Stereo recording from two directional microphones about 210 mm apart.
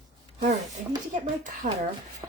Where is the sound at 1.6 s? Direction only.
35° right (ahead or behind).